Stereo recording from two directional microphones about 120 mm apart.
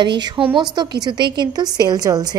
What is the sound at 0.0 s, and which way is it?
A woman's voice, 40° right (ahead or behind).